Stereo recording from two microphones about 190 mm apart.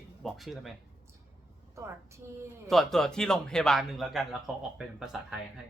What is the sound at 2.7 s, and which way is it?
A woman's voice, centre (ahead or behind).